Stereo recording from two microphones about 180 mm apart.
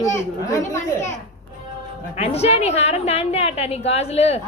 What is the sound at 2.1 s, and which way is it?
A woman's voice, 35° left (ahead or behind).